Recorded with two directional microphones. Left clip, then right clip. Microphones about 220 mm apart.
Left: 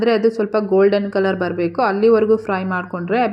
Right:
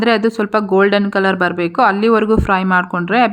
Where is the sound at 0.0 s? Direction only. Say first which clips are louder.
Right 1 dB; 15° right (ahead or behind).